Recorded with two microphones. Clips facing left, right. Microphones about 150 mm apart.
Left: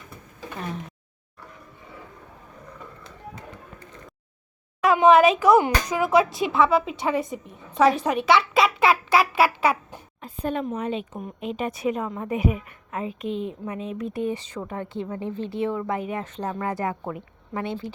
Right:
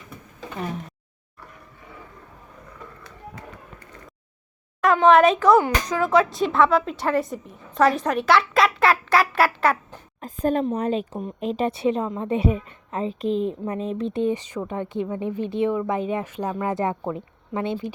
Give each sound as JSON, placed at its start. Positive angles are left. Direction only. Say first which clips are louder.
{"t": 4.8, "sound": "speech", "louder": "even", "side_deg": 5}
{"t": 10.2, "sound": "a woman's voice", "louder": "right 5 dB", "side_deg": -40}
{"t": 14.1, "sound": "a woman's voice", "louder": "right 4 dB", "side_deg": -20}